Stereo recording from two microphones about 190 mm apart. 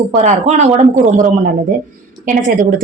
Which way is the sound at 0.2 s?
35° right (ahead or behind).